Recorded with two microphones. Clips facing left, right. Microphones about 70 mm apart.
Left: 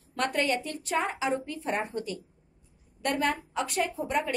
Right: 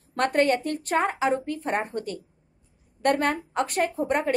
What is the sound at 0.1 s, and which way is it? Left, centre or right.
A woman's voice, right.